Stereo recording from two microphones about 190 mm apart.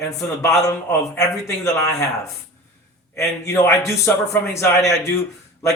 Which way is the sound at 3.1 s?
15° left (ahead or behind).